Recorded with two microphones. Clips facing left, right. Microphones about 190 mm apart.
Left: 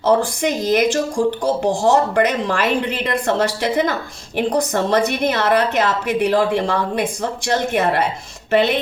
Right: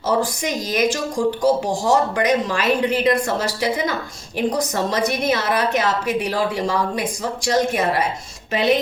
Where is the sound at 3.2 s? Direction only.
60° left (ahead or behind).